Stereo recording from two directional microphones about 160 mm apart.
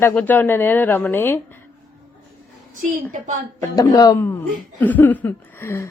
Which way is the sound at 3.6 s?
20° left (ahead or behind).